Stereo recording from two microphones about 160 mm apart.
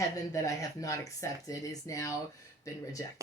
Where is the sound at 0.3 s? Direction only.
20° left (ahead or behind).